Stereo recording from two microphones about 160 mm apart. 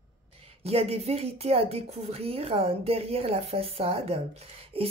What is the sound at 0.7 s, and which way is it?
A woman's voice, 40° right (ahead or behind).